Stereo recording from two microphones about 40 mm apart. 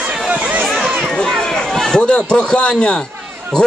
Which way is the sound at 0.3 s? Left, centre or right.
Right.